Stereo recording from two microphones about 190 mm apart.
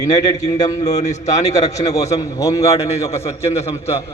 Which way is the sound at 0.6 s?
20° left (ahead or behind).